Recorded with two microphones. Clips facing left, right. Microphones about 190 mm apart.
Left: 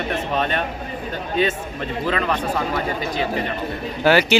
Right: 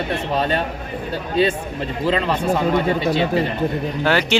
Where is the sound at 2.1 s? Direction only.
30° right (ahead or behind).